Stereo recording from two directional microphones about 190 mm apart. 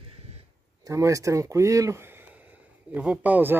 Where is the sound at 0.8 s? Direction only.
15° right (ahead or behind).